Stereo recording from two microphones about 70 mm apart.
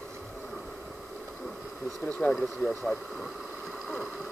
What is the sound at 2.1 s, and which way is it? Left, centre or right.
Speech, centre.